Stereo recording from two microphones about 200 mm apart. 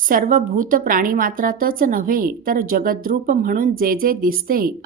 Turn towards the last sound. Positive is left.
turn(degrees=-45)  # may be behind; listen again after turning